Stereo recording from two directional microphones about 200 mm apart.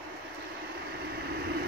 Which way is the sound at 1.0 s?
55° right (ahead or behind).